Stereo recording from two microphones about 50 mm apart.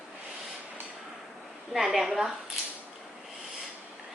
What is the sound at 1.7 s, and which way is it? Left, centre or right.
Speech, centre.